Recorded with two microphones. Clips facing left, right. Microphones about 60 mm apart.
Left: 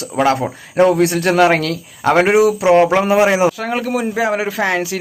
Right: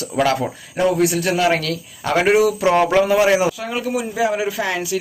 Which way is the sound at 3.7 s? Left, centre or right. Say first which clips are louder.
Left 4 dB; left.